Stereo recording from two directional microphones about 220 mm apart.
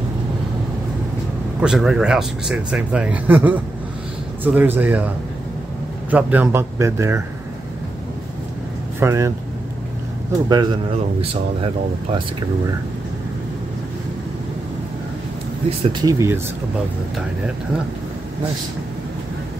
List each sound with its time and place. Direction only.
1.6 s a man's voice: 5° right (ahead or behind)
9.0 s a man's voice: 15° right (ahead or behind)
10.5 s speech: 20° right (ahead or behind)
15.8 s a man's voice: 20° right (ahead or behind)